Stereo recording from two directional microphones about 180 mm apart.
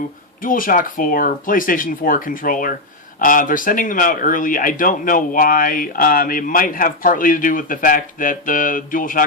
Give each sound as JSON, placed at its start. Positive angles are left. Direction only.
{"t": 0.4, "sound": "speech", "side_deg": 50}